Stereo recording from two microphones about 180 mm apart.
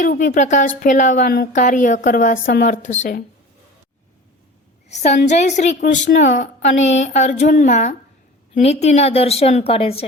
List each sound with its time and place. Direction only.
0.0 s a woman's voice: 50° left (ahead or behind)
4.9 s a woman's voice: 40° left (ahead or behind)
5.8 s speech: 60° left (ahead or behind)
6.2 s a woman's voice: 40° left (ahead or behind)